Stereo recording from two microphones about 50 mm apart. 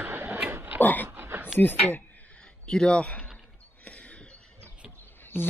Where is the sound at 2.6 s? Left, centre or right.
Centre.